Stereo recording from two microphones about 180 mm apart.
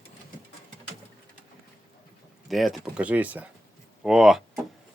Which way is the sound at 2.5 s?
Centre (ahead or behind).